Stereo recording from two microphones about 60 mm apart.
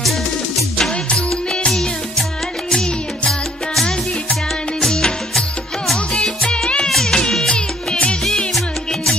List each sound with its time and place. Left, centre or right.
0.7 s music: centre
6.4 s music: centre